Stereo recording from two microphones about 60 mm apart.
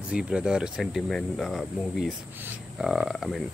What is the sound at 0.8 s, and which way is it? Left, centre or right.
Speech, centre.